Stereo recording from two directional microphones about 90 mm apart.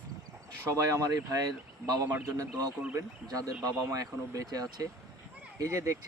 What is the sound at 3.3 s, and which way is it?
Speech, 40° right (ahead or behind).